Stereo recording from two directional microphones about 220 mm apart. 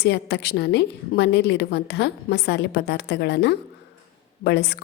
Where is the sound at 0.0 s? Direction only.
50° left (ahead or behind).